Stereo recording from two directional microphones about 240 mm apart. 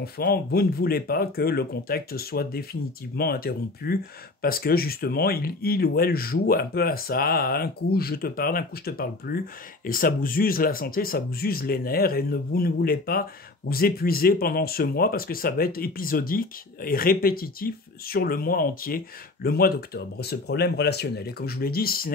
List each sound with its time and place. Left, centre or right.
0.0 s speech: left